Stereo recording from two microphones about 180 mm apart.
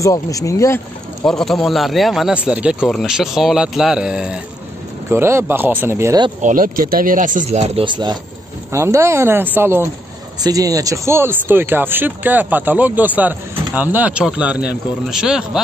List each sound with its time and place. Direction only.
0.0 s speech: 20° left (ahead or behind)
1.2 s speech: centre (ahead or behind); by 6.2 s 15° right (ahead or behind)
6.4 s speech: 50° right (ahead or behind); by 15.6 s 5° right (ahead or behind)